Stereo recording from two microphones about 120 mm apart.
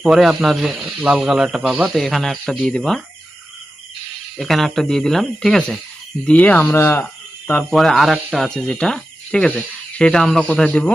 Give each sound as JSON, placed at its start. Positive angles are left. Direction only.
{"t": 0.0, "sound": "speech", "side_deg": -5}
{"t": 4.4, "sound": "speech", "side_deg": 0}
{"t": 7.7, "sound": "speech", "side_deg": 0}